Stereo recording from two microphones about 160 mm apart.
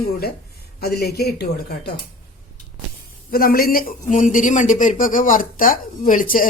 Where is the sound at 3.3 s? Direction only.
65° left (ahead or behind).